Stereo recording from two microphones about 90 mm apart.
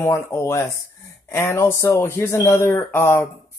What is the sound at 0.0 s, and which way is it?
Speech, 30° left (ahead or behind).